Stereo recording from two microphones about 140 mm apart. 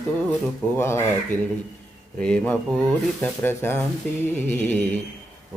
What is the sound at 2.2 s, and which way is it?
Speech, 10° left (ahead or behind).